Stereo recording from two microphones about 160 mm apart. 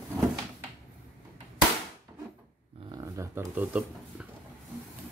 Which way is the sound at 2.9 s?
20° right (ahead or behind).